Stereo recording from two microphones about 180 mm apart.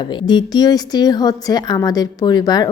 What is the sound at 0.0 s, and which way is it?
A woman's voice, 25° left (ahead or behind).